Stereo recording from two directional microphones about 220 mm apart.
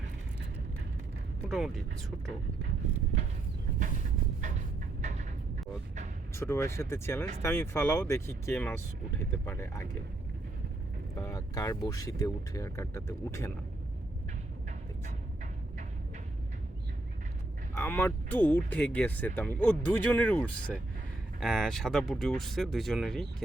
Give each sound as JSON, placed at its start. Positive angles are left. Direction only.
{"t": 1.5, "sound": "speech", "side_deg": 0}
{"t": 4.4, "sound": "a sound", "side_deg": -35}
{"t": 6.3, "sound": "speech", "side_deg": 10}
{"t": 11.2, "sound": "speech", "side_deg": 15}
{"t": 17.7, "sound": "speech", "side_deg": 10}